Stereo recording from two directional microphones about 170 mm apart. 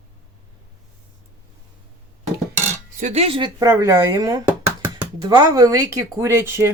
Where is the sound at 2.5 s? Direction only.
45° right (ahead or behind); by 3.6 s 30° right (ahead or behind).